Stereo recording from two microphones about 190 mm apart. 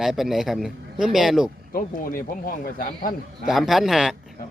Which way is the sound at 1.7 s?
45° left (ahead or behind).